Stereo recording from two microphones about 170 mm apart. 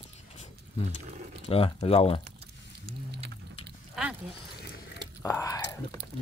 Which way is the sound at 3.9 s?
5° right (ahead or behind).